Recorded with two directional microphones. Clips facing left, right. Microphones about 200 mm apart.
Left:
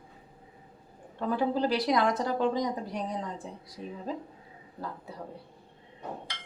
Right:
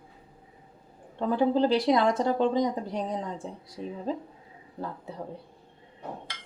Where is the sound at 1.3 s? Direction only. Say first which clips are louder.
Right 4 dB; 25° right (ahead or behind).